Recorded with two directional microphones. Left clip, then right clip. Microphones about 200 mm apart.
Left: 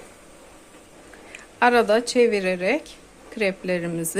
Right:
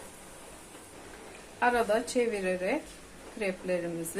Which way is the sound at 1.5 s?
55° left (ahead or behind).